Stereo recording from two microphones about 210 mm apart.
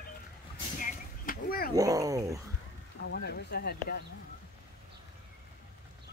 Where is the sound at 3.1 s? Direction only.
50° left (ahead or behind).